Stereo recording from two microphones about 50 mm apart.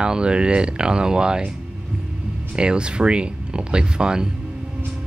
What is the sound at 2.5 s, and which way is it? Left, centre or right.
Speech, centre.